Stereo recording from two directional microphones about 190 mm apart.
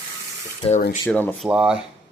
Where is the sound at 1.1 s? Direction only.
5° left (ahead or behind).